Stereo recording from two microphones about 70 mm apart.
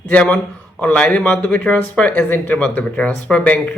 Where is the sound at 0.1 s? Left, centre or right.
Centre.